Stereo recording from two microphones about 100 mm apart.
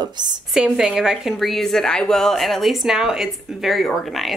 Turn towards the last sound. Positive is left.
turn(degrees=0)  # may be behind; listen again after turning